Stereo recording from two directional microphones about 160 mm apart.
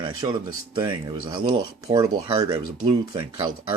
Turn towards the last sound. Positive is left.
turn(degrees=-30)  # may be behind; listen again after turning